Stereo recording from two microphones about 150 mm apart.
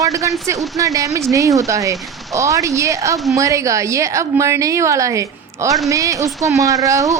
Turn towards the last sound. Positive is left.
turn(degrees=-20)  # may be behind; listen again after turning